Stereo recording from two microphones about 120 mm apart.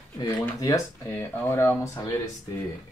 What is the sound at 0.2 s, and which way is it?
Speech, 30° left (ahead or behind).